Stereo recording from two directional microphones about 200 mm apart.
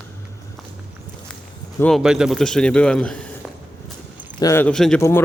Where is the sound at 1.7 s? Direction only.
5° left (ahead or behind).